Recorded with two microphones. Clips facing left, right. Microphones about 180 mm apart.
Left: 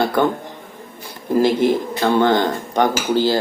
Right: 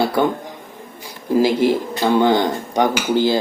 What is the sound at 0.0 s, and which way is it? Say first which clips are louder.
Speech: even; 10° right (ahead or behind).